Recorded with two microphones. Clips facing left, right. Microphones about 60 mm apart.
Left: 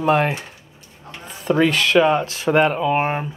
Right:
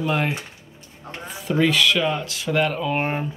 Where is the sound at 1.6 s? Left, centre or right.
Left.